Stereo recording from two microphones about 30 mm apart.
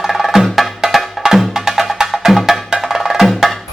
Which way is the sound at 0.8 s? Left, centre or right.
Centre.